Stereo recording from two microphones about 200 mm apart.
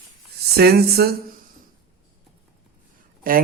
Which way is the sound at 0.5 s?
50° right (ahead or behind).